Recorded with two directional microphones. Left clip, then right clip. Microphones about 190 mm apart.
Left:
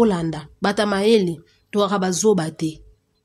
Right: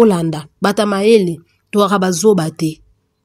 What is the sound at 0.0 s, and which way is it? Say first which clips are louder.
A woman's voice: right 7 dB; 25° right (ahead or behind).